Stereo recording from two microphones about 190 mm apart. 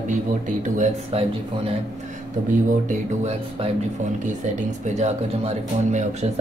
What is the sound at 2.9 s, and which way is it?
Speech, 35° right (ahead or behind).